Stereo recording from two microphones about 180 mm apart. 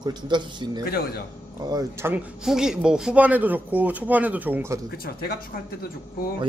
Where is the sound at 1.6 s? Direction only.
15° right (ahead or behind).